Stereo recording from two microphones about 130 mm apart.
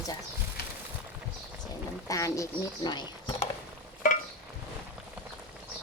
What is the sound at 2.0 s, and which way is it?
Speech, 25° left (ahead or behind).